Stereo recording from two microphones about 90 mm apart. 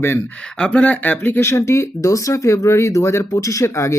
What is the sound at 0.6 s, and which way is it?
Speech, 10° left (ahead or behind).